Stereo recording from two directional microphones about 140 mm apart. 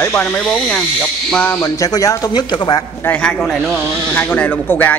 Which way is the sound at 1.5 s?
25° left (ahead or behind).